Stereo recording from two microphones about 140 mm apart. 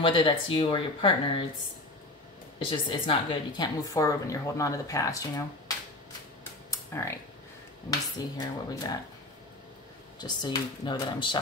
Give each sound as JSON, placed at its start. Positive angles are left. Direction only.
{"t": 0.0, "sound": "speech", "side_deg": 35}
{"t": 2.7, "sound": "a woman's voice", "side_deg": 35}
{"t": 6.7, "sound": "a sound", "side_deg": 20}
{"t": 8.2, "sound": "a woman's voice", "side_deg": 25}
{"t": 10.1, "sound": "speech", "side_deg": 30}